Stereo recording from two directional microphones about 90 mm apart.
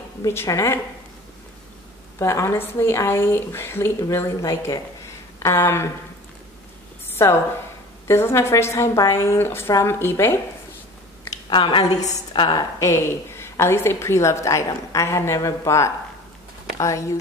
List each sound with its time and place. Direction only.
0.5 s a woman's voice: 35° left (ahead or behind)
2.1 s speech: 30° left (ahead or behind)
8.1 s speech: 30° left (ahead or behind)
11.4 s a woman's voice: 70° left (ahead or behind)
11.9 s a woman's voice: 55° left (ahead or behind); by 17.0 s 35° left (ahead or behind)